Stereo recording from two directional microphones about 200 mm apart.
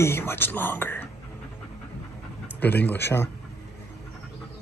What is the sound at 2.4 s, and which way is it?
Speech, 10° left (ahead or behind).